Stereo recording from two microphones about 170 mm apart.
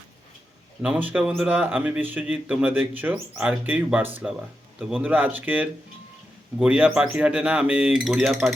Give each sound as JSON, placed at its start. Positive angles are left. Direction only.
{"t": 0.8, "sound": "a man's voice", "side_deg": -5}